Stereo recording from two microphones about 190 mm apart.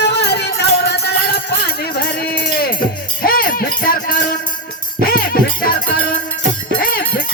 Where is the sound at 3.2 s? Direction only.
50° left (ahead or behind).